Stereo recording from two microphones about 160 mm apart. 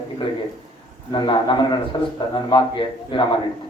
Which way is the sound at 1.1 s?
30° left (ahead or behind).